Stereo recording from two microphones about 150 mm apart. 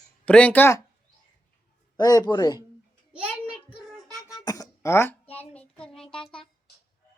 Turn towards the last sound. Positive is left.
turn(degrees=5)  # may be behind; listen again after turning